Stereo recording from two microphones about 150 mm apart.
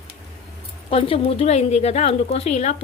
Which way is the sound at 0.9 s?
40° left (ahead or behind).